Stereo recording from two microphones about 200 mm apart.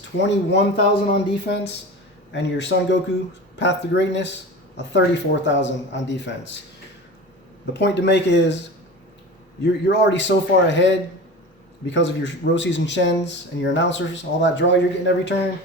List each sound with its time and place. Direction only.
0.2 s a man's voice: 60° left (ahead or behind)
7.7 s a man's voice: 60° left (ahead or behind)
9.8 s a man's voice: 60° left (ahead or behind)